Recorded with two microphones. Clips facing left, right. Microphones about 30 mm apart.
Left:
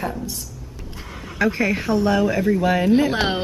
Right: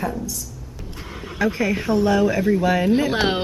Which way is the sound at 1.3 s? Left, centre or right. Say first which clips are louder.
Left 1 dB; centre.